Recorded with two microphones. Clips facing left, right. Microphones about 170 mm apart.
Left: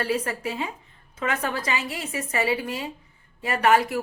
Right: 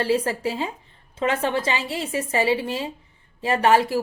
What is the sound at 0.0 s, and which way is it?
Speech, 30° right (ahead or behind).